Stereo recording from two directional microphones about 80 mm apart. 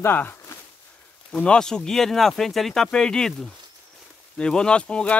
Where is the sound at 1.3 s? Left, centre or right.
Centre.